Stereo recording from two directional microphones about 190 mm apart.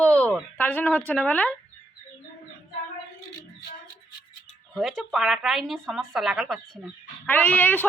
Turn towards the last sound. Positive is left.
turn(degrees=10)  # may be behind; listen again after turning